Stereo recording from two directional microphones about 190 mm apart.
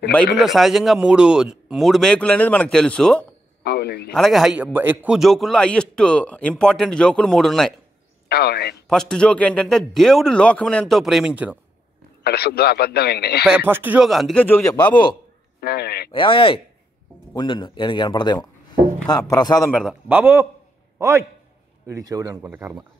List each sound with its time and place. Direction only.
0.4 s a man's voice: centre (ahead or behind)
3.6 s speech: 55° left (ahead or behind)
4.1 s a man's voice: centre (ahead or behind)
8.3 s speech: 55° left (ahead or behind)
8.8 s a man's voice: 5° left (ahead or behind)
12.2 s speech: 55° left (ahead or behind)
13.5 s a man's voice: 10° right (ahead or behind); by 15.0 s 5° left (ahead or behind)
15.6 s speech: 55° left (ahead or behind)
16.1 s speech: 25° left (ahead or behind)
19.7 s speech: centre (ahead or behind)
21.8 s speech: 15° right (ahead or behind)